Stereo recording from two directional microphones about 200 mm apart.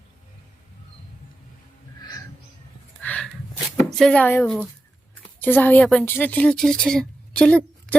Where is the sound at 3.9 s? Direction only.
Centre (ahead or behind).